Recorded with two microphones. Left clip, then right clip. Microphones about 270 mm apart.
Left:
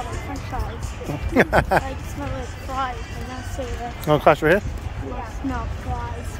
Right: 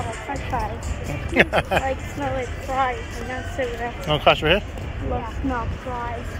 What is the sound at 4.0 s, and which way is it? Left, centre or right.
Speech, left.